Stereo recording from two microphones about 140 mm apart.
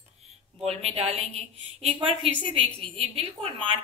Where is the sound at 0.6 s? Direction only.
50° right (ahead or behind).